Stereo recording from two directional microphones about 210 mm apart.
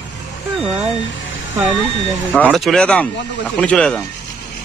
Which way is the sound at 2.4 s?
Centre (ahead or behind).